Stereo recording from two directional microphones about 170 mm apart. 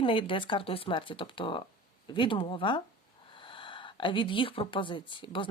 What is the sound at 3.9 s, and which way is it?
Speech, 30° left (ahead or behind).